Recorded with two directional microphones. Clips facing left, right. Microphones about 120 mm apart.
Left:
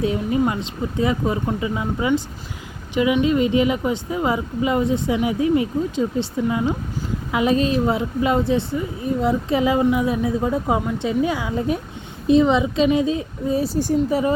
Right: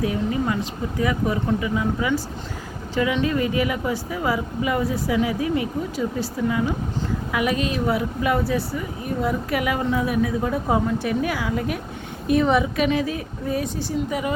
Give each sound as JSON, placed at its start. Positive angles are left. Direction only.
{"t": 0.0, "sound": "a woman's voice", "side_deg": 25}